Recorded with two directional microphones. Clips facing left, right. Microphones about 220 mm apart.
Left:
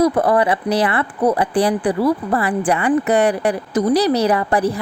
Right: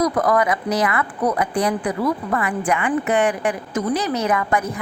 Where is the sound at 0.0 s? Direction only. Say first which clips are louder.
Left 3 dB; 30° left (ahead or behind).